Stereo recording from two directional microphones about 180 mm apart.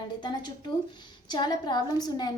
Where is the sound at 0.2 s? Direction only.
25° left (ahead or behind).